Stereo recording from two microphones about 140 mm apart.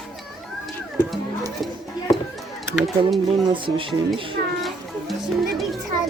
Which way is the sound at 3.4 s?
35° right (ahead or behind).